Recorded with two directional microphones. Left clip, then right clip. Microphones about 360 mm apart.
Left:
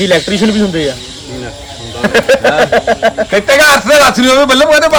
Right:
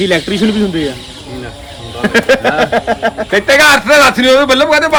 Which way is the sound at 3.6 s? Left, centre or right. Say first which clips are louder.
Even; centre.